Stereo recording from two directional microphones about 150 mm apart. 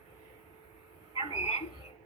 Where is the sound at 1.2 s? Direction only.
45° left (ahead or behind).